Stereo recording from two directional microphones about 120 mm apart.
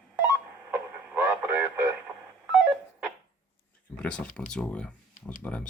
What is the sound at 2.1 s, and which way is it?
Telephone dialing, 10° right (ahead or behind).